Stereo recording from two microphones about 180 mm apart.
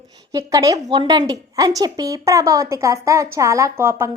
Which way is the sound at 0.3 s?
20° right (ahead or behind).